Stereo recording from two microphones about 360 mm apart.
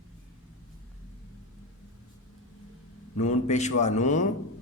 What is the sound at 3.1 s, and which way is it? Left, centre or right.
A man's voice, centre.